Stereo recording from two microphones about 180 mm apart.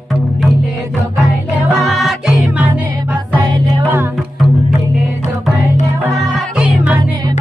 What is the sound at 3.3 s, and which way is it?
Music, 25° right (ahead or behind).